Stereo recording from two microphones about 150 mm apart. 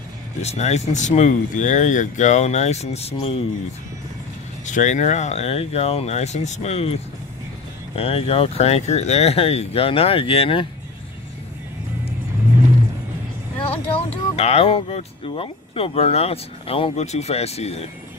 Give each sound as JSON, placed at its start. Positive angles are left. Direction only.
{"t": 0.4, "sound": "speech", "side_deg": 45}
{"t": 4.6, "sound": "speech", "side_deg": 55}
{"t": 13.7, "sound": "speech", "side_deg": 40}